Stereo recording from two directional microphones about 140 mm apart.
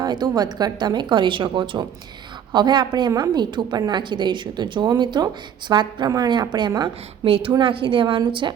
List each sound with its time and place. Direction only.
0.0 s a woman's voice: 30° right (ahead or behind)